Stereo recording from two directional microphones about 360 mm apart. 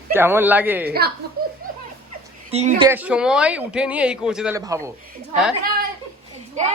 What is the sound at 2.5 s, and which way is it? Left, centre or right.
Speech, centre.